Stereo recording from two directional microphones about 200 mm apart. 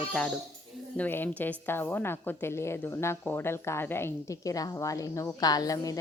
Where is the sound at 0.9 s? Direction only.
10° left (ahead or behind).